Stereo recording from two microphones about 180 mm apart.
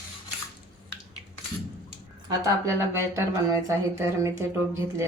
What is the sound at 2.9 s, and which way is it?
A woman's voice, 15° right (ahead or behind).